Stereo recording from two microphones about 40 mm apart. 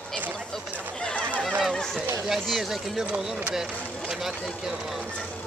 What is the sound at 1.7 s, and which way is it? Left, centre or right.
Speech, centre.